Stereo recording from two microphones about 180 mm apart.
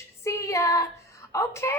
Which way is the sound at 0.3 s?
15° left (ahead or behind).